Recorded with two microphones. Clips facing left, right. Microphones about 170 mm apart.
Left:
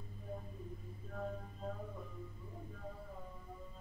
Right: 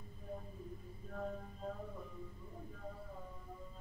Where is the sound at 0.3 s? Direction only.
Centre (ahead or behind).